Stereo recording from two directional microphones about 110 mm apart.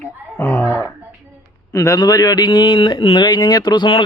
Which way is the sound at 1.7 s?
30° left (ahead or behind).